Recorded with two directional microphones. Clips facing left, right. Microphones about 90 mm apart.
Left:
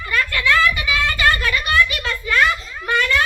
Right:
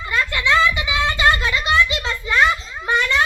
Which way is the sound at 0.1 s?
20° right (ahead or behind).